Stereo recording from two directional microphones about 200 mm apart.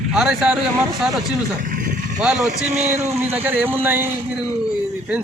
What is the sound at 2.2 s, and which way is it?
Speech, 5° right (ahead or behind).